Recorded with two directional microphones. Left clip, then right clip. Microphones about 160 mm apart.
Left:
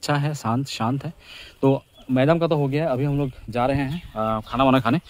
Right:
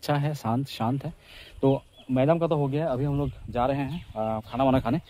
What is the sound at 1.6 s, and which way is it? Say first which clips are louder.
Speech: left 4 dB; 30° left (ahead or behind).